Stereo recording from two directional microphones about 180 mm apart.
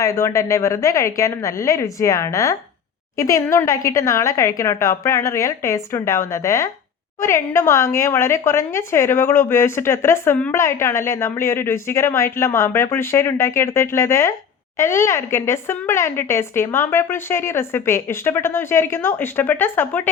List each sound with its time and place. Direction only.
0.0 s a woman's voice: 15° left (ahead or behind)